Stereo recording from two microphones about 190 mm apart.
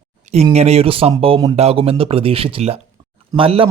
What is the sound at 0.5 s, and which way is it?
Speech, 35° right (ahead or behind).